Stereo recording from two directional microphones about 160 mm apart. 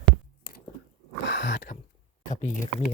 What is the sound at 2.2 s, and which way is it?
Speech, 50° left (ahead or behind).